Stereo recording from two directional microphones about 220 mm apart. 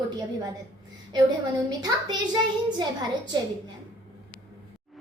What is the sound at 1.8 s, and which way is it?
Speech, 20° right (ahead or behind).